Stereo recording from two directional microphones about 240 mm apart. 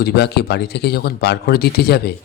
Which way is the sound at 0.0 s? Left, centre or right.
Left.